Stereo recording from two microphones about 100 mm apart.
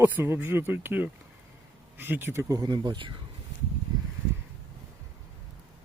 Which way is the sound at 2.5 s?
40° right (ahead or behind).